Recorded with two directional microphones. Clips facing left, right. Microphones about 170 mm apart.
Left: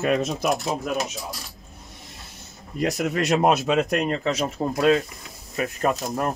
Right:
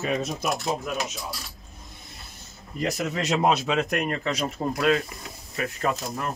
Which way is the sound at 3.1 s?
55° left (ahead or behind).